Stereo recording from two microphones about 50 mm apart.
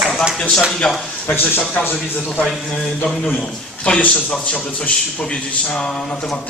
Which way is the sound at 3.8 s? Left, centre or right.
Left.